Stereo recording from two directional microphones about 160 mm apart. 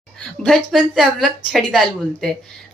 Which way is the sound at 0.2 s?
Centre (ahead or behind).